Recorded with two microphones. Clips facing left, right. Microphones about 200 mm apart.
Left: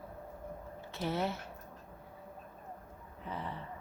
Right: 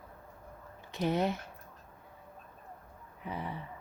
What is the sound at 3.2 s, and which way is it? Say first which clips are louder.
Speech: right 2 dB; 10° right (ahead or behind).